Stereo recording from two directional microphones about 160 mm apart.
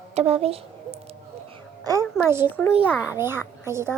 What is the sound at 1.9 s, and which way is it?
A child's voice, 20° right (ahead or behind).